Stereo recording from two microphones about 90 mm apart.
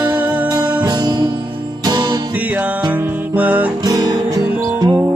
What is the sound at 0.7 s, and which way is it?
Music, 55° right (ahead or behind).